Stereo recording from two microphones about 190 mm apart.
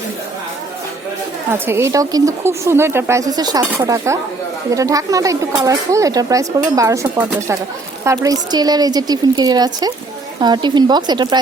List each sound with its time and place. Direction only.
1.5 s a woman's voice: 10° right (ahead or behind)